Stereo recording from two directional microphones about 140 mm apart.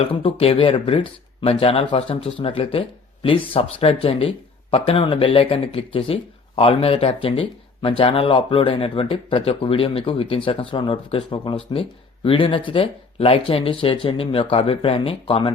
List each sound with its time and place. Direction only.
0.0 s speech: 45° left (ahead or behind)